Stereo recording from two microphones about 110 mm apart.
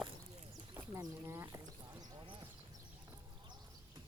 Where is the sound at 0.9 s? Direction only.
25° right (ahead or behind).